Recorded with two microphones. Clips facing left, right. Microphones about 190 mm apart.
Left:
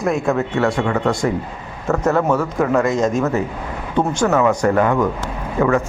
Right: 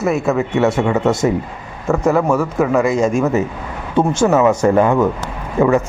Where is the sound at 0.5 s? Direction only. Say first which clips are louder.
Right 3 dB; 20° right (ahead or behind).